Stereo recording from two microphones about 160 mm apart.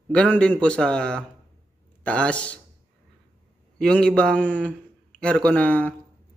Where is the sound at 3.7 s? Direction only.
5° left (ahead or behind).